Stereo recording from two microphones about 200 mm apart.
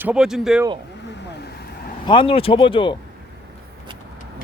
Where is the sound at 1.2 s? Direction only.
55° left (ahead or behind).